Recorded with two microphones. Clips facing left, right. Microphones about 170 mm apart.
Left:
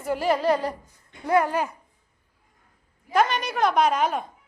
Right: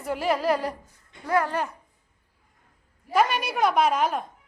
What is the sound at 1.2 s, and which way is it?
Speech, 20° left (ahead or behind).